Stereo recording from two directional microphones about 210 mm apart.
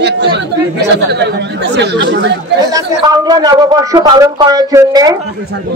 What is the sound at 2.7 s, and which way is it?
A man's voice, 15° right (ahead or behind).